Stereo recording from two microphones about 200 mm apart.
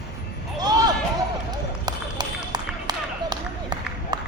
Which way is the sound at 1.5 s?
20° right (ahead or behind).